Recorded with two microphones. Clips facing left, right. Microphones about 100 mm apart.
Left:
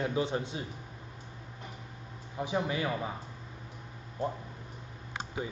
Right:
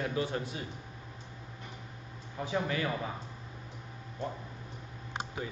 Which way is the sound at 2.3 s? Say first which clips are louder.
Left 1 dB; 15° left (ahead or behind).